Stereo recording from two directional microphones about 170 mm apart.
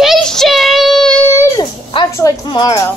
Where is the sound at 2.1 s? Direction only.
20° left (ahead or behind).